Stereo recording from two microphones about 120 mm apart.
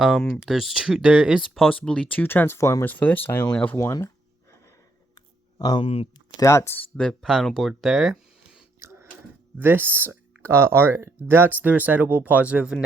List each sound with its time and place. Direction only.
0.0 s speech: 5° left (ahead or behind)
1.7 s speech: 10° left (ahead or behind)
3.8 s speech: 25° left (ahead or behind)
5.1 s a sound: 30° left (ahead or behind)
5.7 s speech: 55° left (ahead or behind)
6.3 s speech: 25° left (ahead or behind); by 8.6 s 5° right (ahead or behind)
8.8 s a sound: 25° right (ahead or behind)
9.6 s speech: 15° right (ahead or behind)